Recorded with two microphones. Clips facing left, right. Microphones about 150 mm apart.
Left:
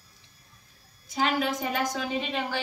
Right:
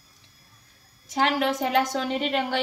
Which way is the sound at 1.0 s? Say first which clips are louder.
Right 3 dB; 80° right.